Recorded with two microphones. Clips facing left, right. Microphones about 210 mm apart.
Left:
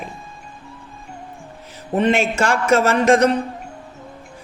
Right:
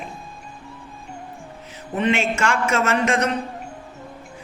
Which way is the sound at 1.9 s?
40° left (ahead or behind).